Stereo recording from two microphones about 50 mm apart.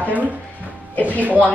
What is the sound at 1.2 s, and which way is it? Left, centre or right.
Speech, right.